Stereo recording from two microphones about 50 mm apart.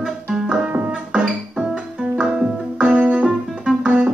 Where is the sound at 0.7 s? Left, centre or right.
Right.